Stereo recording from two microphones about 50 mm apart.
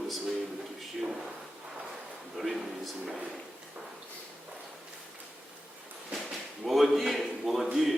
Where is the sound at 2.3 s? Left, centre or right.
Centre.